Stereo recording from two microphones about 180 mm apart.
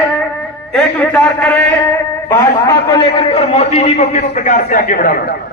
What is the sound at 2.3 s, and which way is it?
A man's voice, 20° left (ahead or behind).